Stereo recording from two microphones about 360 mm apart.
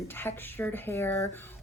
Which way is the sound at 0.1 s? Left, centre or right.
Centre.